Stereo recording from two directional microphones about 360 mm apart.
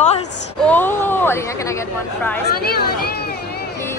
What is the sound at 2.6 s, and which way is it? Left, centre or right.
Speech, left.